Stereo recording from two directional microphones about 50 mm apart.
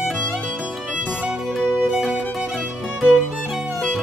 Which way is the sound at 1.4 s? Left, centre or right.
Centre.